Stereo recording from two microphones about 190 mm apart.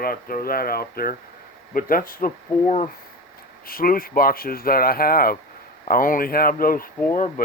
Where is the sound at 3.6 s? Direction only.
50° left (ahead or behind).